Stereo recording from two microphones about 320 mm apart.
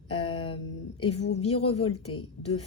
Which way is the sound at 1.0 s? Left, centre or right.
Left.